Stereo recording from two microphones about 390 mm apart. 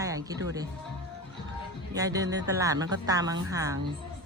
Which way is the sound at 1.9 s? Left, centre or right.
Centre.